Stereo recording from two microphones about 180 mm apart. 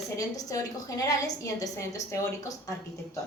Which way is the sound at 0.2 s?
20° left (ahead or behind).